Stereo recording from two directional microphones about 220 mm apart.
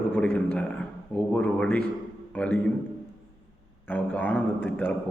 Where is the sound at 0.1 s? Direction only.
10° left (ahead or behind).